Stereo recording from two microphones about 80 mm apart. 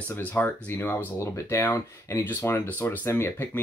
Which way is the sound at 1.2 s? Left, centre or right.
Left.